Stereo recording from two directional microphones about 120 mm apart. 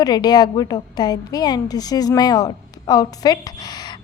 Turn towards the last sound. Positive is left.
turn(degrees=30)  # may be behind; listen again after turning